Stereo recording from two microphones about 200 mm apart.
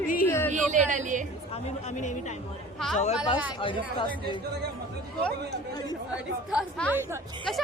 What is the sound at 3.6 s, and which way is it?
Speech, 25° left (ahead or behind).